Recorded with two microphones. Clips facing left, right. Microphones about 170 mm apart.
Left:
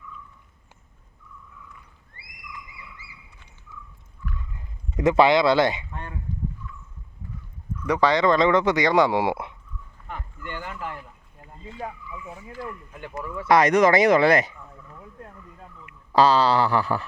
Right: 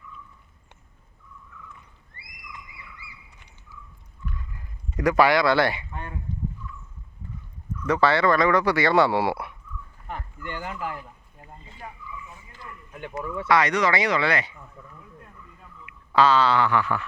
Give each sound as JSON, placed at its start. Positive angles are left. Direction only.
{"t": 4.9, "sound": "speech", "side_deg": 25}
{"t": 5.9, "sound": "a sound", "side_deg": -5}
{"t": 7.9, "sound": "speech", "side_deg": 15}
{"t": 10.4, "sound": "speech", "side_deg": -20}
{"t": 11.8, "sound": "speech", "side_deg": 90}
{"t": 13.0, "sound": "speech", "side_deg": -25}
{"t": 13.5, "sound": "speech", "side_deg": 45}
{"t": 16.1, "sound": "a sound", "side_deg": 35}